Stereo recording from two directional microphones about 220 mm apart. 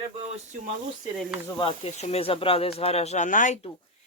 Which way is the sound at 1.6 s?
25° left (ahead or behind).